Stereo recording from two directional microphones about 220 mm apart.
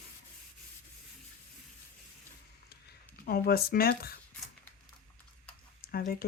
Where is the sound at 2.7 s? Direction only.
45° left (ahead or behind).